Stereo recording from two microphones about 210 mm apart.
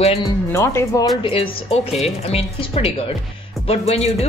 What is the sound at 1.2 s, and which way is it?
Speech, 25° left (ahead or behind).